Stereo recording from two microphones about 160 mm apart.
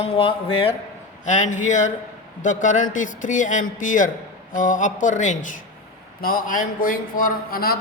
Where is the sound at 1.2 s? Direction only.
50° left (ahead or behind).